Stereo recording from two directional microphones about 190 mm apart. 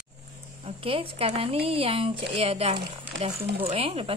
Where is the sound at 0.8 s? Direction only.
30° right (ahead or behind).